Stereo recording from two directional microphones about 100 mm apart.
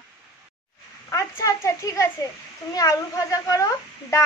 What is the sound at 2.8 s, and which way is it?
A woman's voice, 35° left (ahead or behind).